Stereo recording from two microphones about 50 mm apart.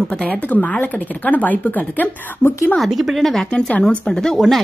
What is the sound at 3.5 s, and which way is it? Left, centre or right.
Speech, left.